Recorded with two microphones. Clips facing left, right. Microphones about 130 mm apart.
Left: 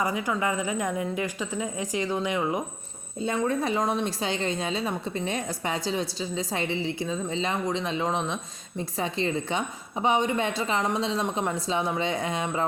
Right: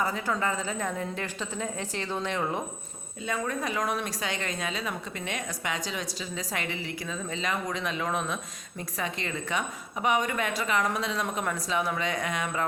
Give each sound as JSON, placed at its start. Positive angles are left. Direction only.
{"t": 0.0, "sound": "a woman's voice", "side_deg": 15}
{"t": 3.2, "sound": "a woman's voice", "side_deg": 30}